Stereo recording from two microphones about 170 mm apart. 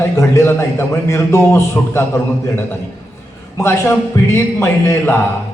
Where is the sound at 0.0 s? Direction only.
15° left (ahead or behind).